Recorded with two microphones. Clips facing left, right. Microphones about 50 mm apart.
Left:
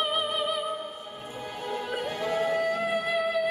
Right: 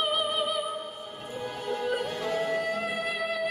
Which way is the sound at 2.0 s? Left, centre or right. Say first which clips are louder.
Left 1 dB; left.